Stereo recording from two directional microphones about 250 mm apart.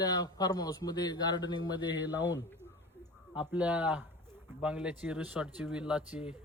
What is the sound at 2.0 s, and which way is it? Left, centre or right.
Speech, centre.